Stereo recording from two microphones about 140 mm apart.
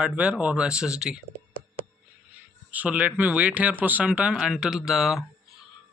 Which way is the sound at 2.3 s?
10° right (ahead or behind).